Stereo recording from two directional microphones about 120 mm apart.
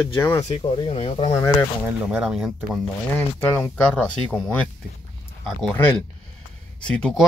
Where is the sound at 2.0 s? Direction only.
5° right (ahead or behind).